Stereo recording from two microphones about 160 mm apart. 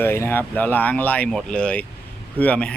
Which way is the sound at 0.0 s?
15° left (ahead or behind).